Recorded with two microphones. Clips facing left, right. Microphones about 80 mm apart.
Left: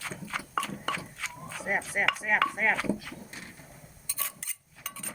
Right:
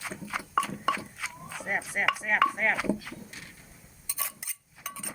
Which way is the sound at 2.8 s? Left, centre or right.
Centre.